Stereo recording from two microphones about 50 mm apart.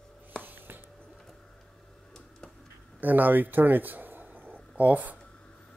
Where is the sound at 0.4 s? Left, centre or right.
Right.